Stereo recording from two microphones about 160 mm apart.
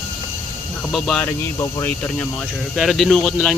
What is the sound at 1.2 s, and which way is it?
A man's voice, 20° left (ahead or behind).